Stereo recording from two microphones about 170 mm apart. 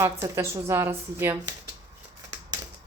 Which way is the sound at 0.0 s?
15° right (ahead or behind).